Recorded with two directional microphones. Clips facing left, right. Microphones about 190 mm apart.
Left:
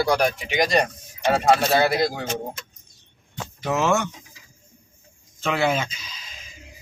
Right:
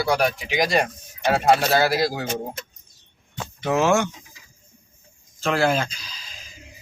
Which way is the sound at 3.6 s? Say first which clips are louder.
Right 2 dB; centre (ahead or behind).